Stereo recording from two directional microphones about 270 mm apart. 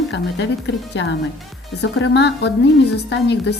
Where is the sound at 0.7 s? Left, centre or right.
Left.